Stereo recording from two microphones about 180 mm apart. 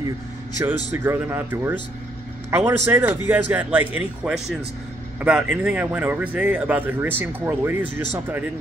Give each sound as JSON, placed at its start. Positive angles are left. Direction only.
{"t": 0.9, "sound": "a man's voice", "side_deg": -10}